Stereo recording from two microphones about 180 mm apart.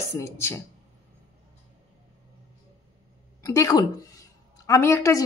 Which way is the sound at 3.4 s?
20° left (ahead or behind).